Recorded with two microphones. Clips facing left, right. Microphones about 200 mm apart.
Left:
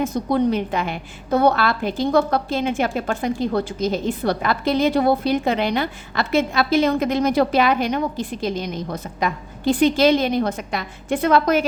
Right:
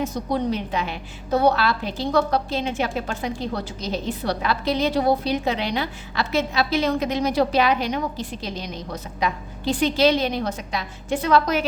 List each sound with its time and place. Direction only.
0.0 s a woman's voice: 55° left (ahead or behind)